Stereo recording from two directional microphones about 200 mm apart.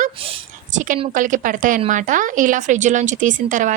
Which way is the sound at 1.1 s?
40° right (ahead or behind).